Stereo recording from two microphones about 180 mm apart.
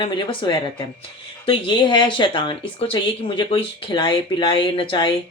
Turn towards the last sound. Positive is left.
turn(degrees=30)  # may be behind; listen again after turning